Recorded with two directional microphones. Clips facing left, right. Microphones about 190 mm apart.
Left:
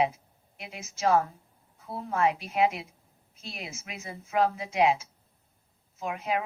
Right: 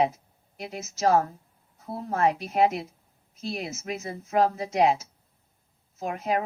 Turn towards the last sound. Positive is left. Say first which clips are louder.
# right 3 dB
turn(degrees=-40)  # may be behind; listen again after turning